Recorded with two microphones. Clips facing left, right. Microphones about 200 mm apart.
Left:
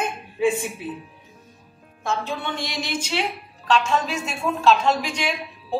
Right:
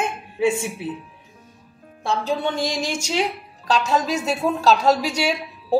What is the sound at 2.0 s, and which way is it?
A woman's voice, 35° right (ahead or behind).